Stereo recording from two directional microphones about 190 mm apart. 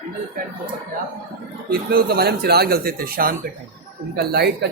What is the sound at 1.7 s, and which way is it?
Speech, 50° right (ahead or behind).